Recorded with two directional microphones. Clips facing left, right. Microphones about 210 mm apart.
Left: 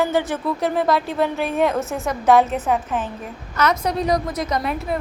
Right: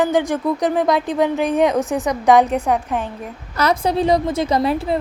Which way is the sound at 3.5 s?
30° right (ahead or behind).